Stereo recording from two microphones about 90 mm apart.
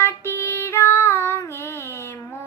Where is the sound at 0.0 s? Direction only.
30° left (ahead or behind).